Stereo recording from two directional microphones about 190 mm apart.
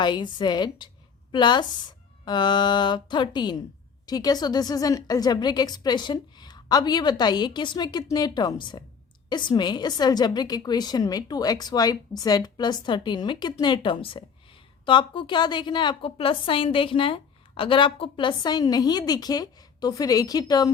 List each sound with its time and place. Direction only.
0.0 s a woman's voice: 25° left (ahead or behind)